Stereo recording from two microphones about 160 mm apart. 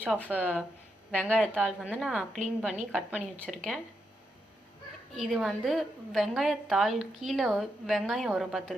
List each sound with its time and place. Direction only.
0.3 s speech: 10° right (ahead or behind)
1.1 s a woman's voice: 5° left (ahead or behind)
1.5 s a woman's voice: 10° right (ahead or behind)
3.3 s speech: 5° left (ahead or behind)
5.2 s a woman's voice: centre (ahead or behind)